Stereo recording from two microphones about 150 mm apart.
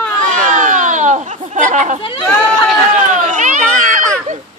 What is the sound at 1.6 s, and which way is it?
Speech, 55° right (ahead or behind).